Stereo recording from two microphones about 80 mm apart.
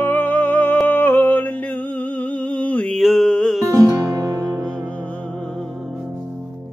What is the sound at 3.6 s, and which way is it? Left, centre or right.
Music, right.